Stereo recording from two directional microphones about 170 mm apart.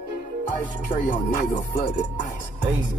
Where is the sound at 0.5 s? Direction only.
50° left (ahead or behind).